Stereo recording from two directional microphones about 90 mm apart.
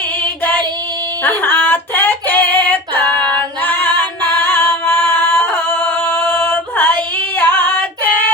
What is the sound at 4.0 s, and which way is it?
Singing, 25° left (ahead or behind).